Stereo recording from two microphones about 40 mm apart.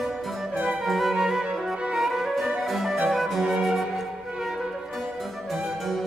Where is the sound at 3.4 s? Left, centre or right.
Centre.